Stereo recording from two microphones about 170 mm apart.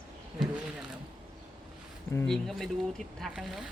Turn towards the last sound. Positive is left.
turn(degrees=0)  # may be behind; listen again after turning